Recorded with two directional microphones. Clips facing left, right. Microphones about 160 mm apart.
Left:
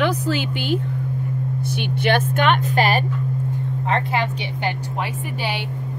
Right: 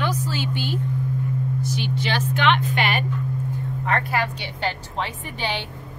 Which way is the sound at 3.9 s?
25° left (ahead or behind).